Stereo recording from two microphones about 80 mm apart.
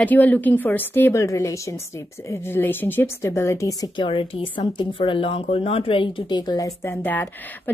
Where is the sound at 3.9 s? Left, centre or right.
Left.